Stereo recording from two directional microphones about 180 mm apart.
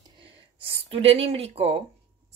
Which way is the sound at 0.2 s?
30° right (ahead or behind).